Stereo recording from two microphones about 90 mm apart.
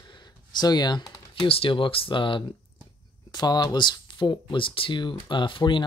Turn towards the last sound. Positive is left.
turn(degrees=65)  # may be behind; listen again after turning